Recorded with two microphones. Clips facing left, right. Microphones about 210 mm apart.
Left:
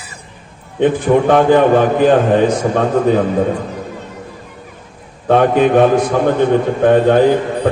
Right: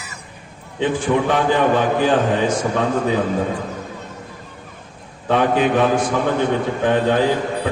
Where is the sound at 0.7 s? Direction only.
55° left (ahead or behind).